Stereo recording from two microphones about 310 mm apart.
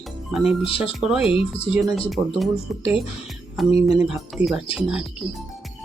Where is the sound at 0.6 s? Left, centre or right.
Centre.